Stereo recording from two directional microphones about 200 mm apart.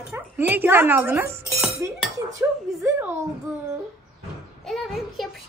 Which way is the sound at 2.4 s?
15° right (ahead or behind).